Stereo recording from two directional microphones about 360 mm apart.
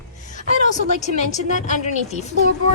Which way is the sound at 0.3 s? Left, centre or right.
Centre.